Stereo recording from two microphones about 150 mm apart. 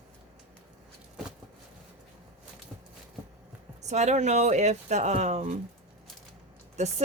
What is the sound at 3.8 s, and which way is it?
Speech, 50° right (ahead or behind).